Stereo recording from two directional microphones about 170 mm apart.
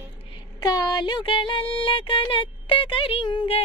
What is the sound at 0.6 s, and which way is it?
Music, 20° left (ahead or behind).